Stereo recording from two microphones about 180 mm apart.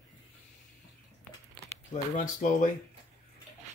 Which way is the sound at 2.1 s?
45° left (ahead or behind).